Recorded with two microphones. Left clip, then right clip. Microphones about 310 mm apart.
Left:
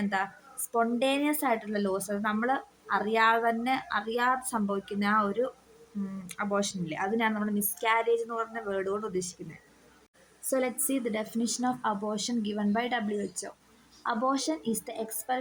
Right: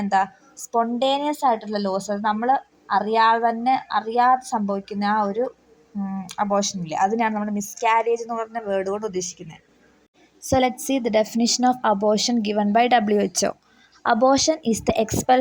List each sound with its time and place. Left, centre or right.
0.7 s speech: centre
10.5 s a woman's voice: right